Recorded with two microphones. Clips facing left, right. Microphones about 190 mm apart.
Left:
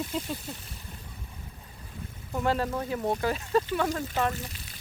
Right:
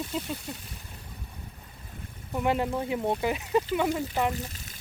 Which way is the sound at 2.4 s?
20° right (ahead or behind).